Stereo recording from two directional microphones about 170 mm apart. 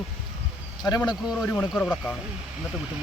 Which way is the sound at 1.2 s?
5° left (ahead or behind).